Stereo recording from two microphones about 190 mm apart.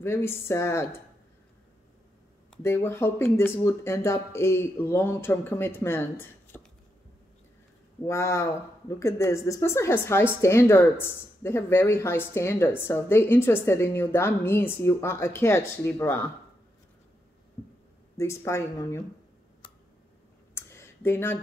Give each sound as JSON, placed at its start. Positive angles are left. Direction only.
{"t": 0.0, "sound": "speech", "side_deg": 10}
{"t": 2.5, "sound": "speech", "side_deg": 10}
{"t": 8.0, "sound": "speech", "side_deg": 15}
{"t": 18.1, "sound": "speech", "side_deg": 15}
{"t": 20.5, "sound": "a sound", "side_deg": 15}